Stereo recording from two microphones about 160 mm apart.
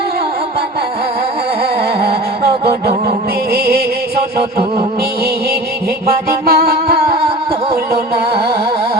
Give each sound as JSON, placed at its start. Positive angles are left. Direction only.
{"t": 2.0, "sound": "music", "side_deg": -85}
{"t": 6.2, "sound": "music", "side_deg": -80}